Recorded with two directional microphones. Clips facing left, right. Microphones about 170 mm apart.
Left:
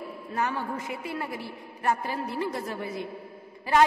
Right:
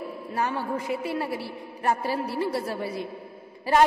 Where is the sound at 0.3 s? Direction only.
30° right (ahead or behind).